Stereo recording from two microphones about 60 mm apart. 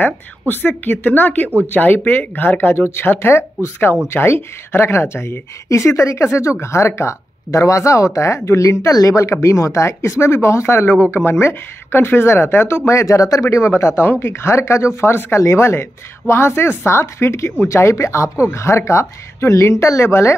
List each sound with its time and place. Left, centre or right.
0.0 s a woman's voice: left